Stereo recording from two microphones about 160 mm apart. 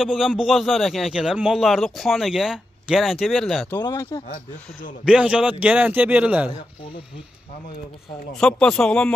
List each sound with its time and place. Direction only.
0.0 s a man's voice: 5° right (ahead or behind)
3.8 s speech: 25° left (ahead or behind)
5.0 s a man's voice: 5° right (ahead or behind)
8.4 s a man's voice: 5° left (ahead or behind)